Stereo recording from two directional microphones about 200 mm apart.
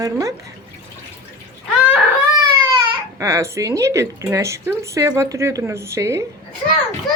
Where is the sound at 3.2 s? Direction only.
15° right (ahead or behind).